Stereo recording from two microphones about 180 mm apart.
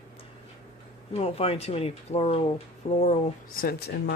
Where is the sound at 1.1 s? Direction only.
35° left (ahead or behind).